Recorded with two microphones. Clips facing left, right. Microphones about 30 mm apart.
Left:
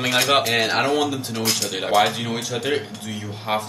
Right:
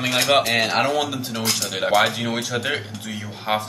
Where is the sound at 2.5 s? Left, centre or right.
Centre.